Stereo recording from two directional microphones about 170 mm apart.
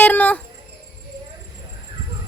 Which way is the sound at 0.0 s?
10° left (ahead or behind).